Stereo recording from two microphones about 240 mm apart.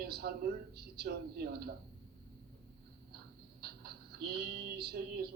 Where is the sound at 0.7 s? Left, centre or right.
Right.